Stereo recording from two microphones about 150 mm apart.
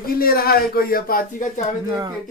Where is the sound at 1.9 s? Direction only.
25° right (ahead or behind).